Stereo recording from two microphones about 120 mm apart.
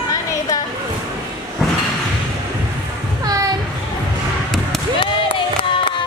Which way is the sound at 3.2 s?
30° right (ahead or behind).